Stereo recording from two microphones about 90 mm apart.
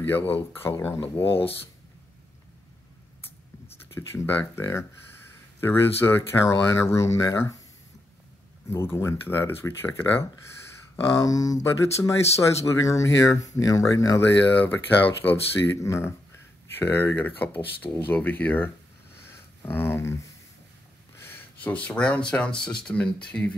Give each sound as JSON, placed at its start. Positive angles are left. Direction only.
{"t": 0.3, "sound": "speech", "side_deg": 25}
{"t": 3.9, "sound": "speech", "side_deg": 25}
{"t": 8.6, "sound": "speech", "side_deg": 30}
{"t": 11.1, "sound": "speech", "side_deg": 40}
{"t": 14.2, "sound": "speech", "side_deg": 20}
{"t": 19.2, "sound": "a sound", "side_deg": 25}
{"t": 21.2, "sound": "speech", "side_deg": 25}